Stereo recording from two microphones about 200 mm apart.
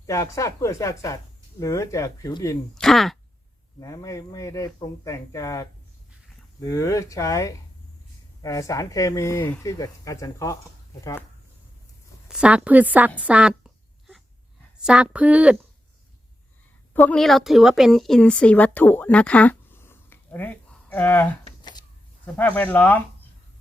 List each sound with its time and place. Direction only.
0.0 s speech: 15° left (ahead or behind)
2.7 s speech: centre (ahead or behind)
3.8 s speech: 15° left (ahead or behind)
12.3 s a woman's voice: 5° right (ahead or behind)
14.8 s speech: 5° right (ahead or behind)
16.9 s speech: 5° left (ahead or behind)
21.6 s a sound: 20° left (ahead or behind)
22.4 s speech: 10° left (ahead or behind)